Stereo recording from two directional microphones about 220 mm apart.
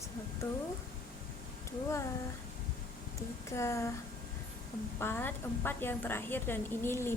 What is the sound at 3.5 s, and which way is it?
Speech, 15° left (ahead or behind).